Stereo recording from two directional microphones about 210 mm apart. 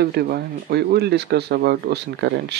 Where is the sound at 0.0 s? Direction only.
50° right (ahead or behind).